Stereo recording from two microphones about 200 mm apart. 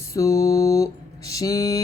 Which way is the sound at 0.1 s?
15° left (ahead or behind).